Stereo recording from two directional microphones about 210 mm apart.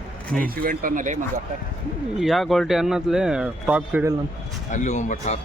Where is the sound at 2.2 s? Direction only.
Centre (ahead or behind).